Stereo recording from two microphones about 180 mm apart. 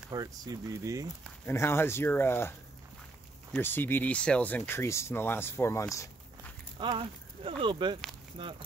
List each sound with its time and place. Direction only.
0.1 s speech: 20° right (ahead or behind)
1.2 s speech: 15° left (ahead or behind)
3.5 s speech: 10° left (ahead or behind)
6.8 s speech: 30° right (ahead or behind)